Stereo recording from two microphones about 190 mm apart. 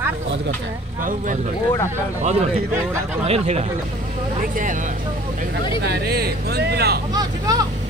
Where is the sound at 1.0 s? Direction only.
45° right (ahead or behind).